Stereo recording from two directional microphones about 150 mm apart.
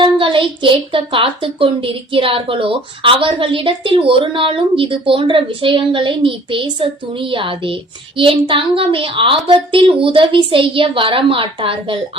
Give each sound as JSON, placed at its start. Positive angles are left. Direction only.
{"t": 0.0, "sound": "speech", "side_deg": -35}